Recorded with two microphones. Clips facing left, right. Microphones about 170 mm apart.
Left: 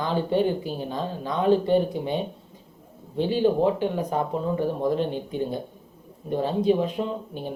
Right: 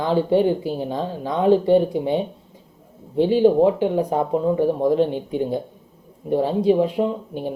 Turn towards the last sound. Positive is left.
turn(degrees=-15)  # may be behind; listen again after turning